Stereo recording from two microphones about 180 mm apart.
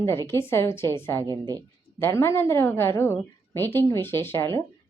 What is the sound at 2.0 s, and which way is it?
A woman's voice, 15° left (ahead or behind).